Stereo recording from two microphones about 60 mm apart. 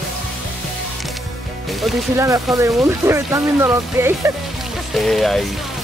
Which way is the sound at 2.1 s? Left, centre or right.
Right.